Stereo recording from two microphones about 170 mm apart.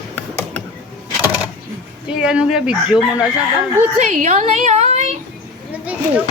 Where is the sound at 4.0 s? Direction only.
45° right (ahead or behind).